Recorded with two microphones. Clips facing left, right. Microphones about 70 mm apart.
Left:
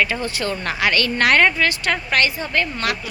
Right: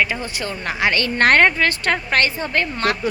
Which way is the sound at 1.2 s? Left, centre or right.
Right.